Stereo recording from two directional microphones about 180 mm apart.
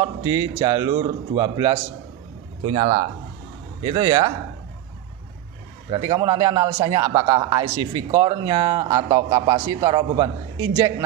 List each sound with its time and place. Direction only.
0.0 s a man's voice: 20° right (ahead or behind)
5.9 s a man's voice: 20° right (ahead or behind)